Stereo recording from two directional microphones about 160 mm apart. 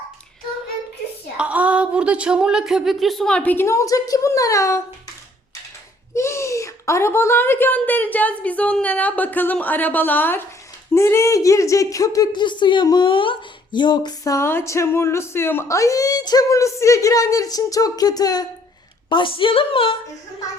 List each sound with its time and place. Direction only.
1.4 s speech: 10° right (ahead or behind); by 4.8 s 20° left (ahead or behind)
6.1 s a woman's voice: 15° left (ahead or behind); by 20.0 s 35° left (ahead or behind)